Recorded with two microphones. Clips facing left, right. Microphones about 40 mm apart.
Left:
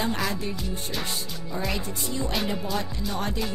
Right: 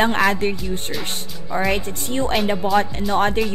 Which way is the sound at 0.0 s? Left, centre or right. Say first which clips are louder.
Right 10 dB; right.